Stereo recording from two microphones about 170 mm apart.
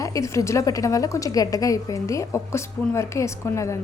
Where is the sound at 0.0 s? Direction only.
20° left (ahead or behind).